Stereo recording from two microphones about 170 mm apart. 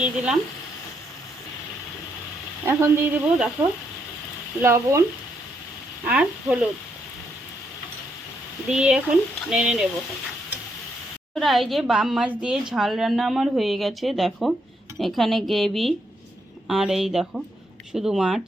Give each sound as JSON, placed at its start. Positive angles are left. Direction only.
{"t": 0.0, "sound": "speech", "side_deg": -5}
{"t": 2.6, "sound": "speech", "side_deg": -15}
{"t": 4.6, "sound": "speech", "side_deg": -15}
{"t": 6.1, "sound": "a woman's voice", "side_deg": -5}
{"t": 8.7, "sound": "a woman's voice", "side_deg": -5}
{"t": 11.3, "sound": "a woman's voice", "side_deg": 0}